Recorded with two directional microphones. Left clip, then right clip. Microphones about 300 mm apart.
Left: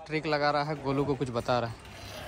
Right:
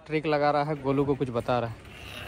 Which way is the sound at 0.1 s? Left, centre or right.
Centre.